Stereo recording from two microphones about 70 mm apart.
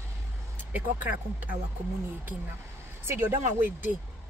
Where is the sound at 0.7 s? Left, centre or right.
Right.